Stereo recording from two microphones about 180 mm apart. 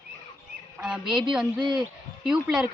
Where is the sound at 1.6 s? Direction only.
25° right (ahead or behind).